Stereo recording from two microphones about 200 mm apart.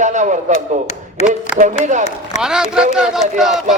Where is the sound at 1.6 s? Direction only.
35° right (ahead or behind).